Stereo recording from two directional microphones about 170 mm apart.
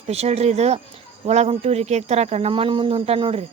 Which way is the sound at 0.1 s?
40° right (ahead or behind).